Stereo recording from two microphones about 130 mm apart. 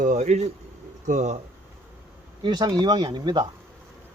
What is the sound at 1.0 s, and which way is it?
Speech, 70° right (ahead or behind).